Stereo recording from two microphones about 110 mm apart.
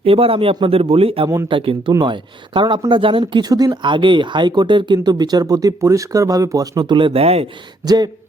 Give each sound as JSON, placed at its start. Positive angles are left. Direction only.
{"t": 0.0, "sound": "speech", "side_deg": -60}
{"t": 3.5, "sound": "speech", "side_deg": -40}
{"t": 7.9, "sound": "speech", "side_deg": -40}